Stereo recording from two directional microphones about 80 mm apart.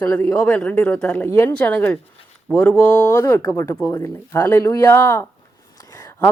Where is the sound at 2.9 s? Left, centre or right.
Left.